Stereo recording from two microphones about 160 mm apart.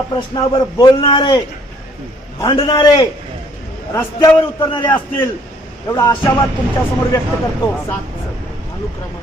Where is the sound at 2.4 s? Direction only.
30° left (ahead or behind).